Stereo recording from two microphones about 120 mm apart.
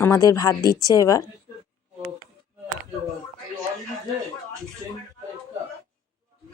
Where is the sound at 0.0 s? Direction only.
25° left (ahead or behind).